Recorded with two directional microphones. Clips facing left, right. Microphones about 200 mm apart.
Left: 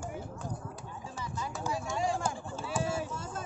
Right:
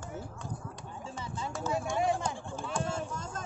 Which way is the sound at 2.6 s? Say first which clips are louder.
Left 2 dB; 5° left (ahead or behind).